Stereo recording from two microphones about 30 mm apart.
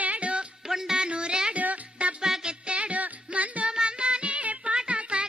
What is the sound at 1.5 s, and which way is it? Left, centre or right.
Music, right.